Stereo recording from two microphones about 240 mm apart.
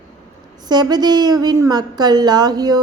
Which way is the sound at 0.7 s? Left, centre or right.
Centre.